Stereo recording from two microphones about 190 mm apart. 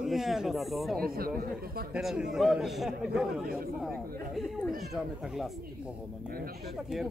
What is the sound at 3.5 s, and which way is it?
Speech, 50° right (ahead or behind).